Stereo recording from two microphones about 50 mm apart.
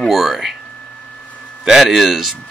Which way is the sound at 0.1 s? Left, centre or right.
Centre.